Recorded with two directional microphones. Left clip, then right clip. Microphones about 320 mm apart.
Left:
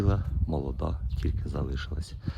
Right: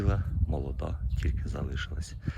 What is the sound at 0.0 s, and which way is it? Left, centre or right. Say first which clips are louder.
Speech: left 3 dB; centre.